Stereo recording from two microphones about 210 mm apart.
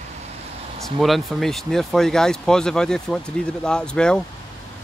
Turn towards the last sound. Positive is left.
turn(degrees=5)  # may be behind; listen again after turning